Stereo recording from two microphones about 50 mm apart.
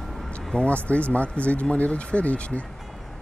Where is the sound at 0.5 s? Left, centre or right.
Left.